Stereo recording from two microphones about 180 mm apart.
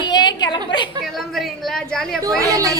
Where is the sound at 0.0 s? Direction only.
25° left (ahead or behind).